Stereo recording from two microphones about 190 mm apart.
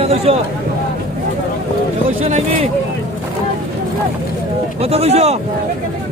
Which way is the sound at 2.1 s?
35° right (ahead or behind).